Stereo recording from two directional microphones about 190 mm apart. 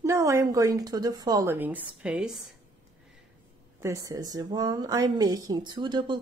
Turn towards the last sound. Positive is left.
turn(degrees=-25)  # may be behind; listen again after turning